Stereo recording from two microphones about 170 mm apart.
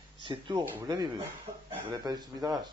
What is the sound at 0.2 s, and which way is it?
A man's voice, 25° right (ahead or behind).